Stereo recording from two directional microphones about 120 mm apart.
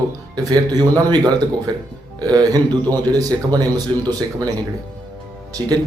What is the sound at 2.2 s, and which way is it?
A man's voice, 35° right (ahead or behind).